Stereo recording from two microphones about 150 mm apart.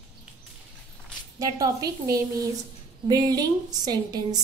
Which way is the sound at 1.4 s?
25° right (ahead or behind).